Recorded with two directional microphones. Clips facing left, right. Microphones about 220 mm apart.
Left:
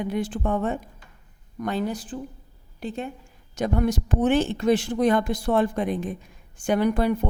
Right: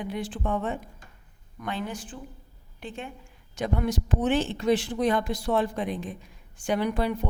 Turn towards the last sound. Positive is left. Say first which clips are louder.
# left 5 dB
turn(degrees=50)  # may be behind; listen again after turning